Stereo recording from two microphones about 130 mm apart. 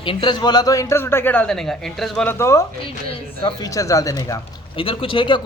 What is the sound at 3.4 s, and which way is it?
Speech, 35° left (ahead or behind).